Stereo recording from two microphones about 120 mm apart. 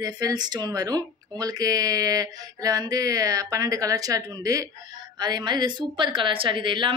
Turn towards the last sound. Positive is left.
turn(degrees=-40)  # may be behind; listen again after turning